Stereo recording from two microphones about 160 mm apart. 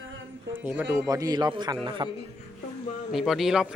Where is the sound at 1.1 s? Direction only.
25° right (ahead or behind).